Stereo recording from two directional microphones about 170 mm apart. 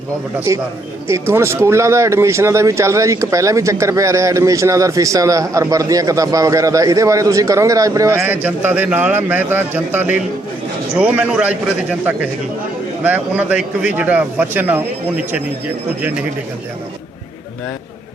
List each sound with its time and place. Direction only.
0.3 s speech: 15° right (ahead or behind)